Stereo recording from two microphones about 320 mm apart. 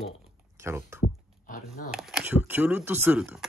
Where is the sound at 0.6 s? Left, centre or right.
Centre.